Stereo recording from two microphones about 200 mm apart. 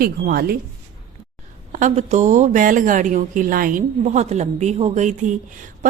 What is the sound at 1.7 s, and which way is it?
Speech, 35° right (ahead or behind).